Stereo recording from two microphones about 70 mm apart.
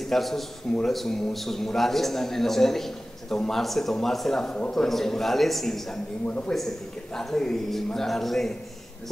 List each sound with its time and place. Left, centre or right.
0.0 s a man's voice: centre
6.2 s a man's voice: centre